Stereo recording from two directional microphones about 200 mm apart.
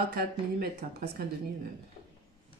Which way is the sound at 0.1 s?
50° right (ahead or behind).